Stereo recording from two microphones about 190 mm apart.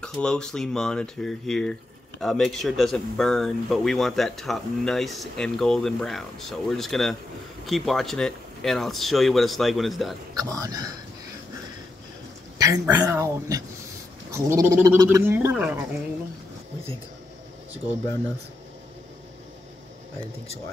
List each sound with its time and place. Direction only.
0.0 s speech: 5° left (ahead or behind)
10.3 s speech: 20° right (ahead or behind)
12.5 s speech: 15° right (ahead or behind)